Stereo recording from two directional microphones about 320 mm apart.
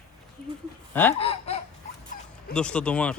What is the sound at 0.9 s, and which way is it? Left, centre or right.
Speech, centre.